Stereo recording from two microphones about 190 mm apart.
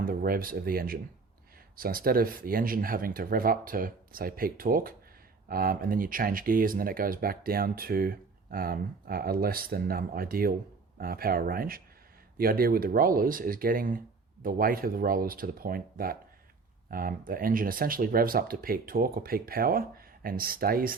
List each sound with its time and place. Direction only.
0.0 s speech: 50° right (ahead or behind)